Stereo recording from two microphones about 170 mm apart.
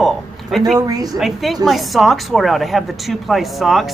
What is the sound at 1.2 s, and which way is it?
Speech, centre (ahead or behind).